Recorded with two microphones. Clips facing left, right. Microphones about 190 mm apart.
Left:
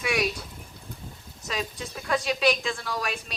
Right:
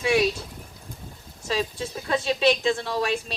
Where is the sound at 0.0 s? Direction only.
25° right (ahead or behind).